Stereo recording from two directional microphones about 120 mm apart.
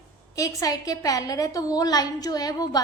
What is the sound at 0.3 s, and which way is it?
A woman's voice, 30° left (ahead or behind).